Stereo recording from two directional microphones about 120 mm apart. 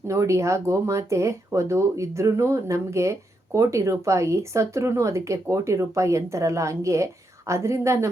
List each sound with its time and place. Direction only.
0.1 s speech: 25° right (ahead or behind)